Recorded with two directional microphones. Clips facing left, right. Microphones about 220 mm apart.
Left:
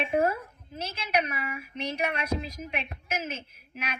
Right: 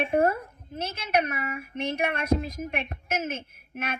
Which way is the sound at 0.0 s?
55° right (ahead or behind).